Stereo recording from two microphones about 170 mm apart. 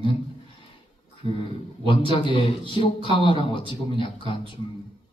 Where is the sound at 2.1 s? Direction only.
30° left (ahead or behind).